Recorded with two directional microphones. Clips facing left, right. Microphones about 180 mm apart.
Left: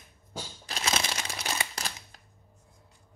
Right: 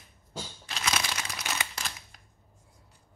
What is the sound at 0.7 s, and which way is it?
Crumpling, 25° left (ahead or behind).